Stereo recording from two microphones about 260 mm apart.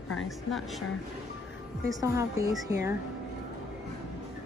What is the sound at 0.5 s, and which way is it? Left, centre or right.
Speech, centre.